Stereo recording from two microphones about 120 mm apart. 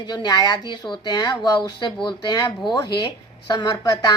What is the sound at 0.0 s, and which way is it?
Speech, 35° left (ahead or behind).